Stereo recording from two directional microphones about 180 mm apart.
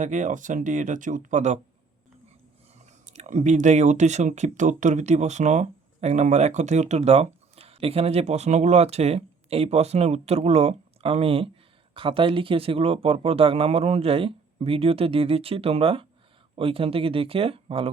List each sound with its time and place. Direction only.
0.0 s speech: 45° right (ahead or behind)
3.1 s speech: 40° right (ahead or behind)